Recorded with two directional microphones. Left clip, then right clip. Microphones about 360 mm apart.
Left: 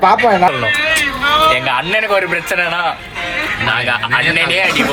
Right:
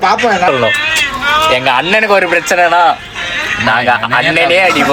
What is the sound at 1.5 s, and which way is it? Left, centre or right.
Speech, right.